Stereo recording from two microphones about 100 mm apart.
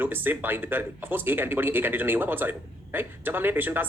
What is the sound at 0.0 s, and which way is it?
Speech, 20° right (ahead or behind).